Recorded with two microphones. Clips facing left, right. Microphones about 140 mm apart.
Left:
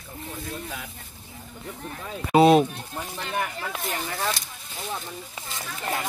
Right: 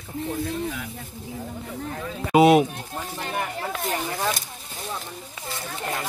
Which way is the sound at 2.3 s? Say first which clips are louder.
Right 1 dB; 10° right (ahead or behind).